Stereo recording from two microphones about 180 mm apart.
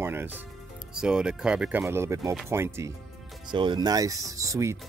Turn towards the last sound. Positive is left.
turn(degrees=-15)  # may be behind; listen again after turning